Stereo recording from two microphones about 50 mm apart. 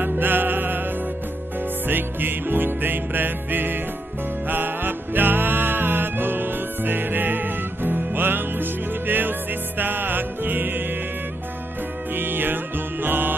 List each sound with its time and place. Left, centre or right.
0.2 s music: right
1.9 s music: right
12.1 s music: right